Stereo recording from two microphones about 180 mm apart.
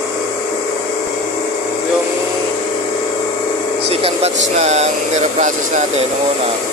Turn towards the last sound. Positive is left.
turn(degrees=-40)  # may be behind; listen again after turning